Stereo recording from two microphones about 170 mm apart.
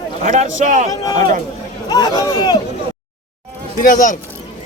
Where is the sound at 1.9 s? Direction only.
25° left (ahead or behind).